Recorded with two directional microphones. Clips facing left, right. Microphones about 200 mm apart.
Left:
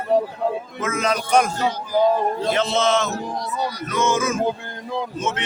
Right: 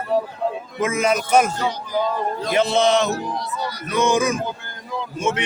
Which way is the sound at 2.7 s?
15° right (ahead or behind).